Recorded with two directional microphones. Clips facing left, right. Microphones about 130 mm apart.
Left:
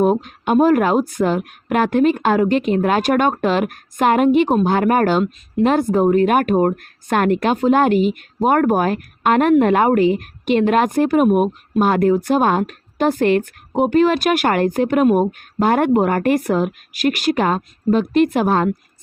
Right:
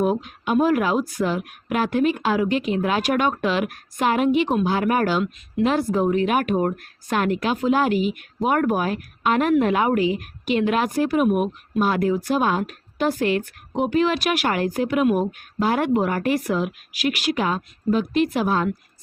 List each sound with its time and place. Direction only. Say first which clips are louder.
0.0 s a woman's voice: left 5 dB; 45° left (ahead or behind)